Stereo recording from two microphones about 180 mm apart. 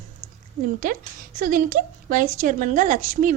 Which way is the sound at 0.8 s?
50° right (ahead or behind).